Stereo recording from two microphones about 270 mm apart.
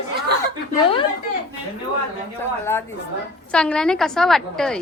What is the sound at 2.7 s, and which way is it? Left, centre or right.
A woman's voice, centre.